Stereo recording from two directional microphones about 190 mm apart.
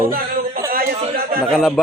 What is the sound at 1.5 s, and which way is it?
Speech, centre (ahead or behind).